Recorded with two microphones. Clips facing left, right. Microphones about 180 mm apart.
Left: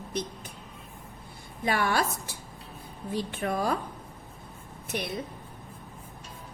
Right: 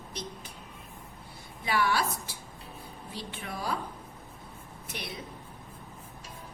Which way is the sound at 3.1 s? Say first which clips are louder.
Left 10 dB; 50° left (ahead or behind).